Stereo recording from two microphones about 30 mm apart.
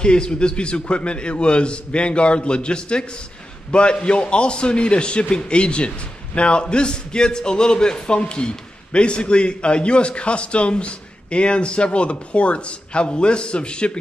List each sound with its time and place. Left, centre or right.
0.0 s a man's voice: left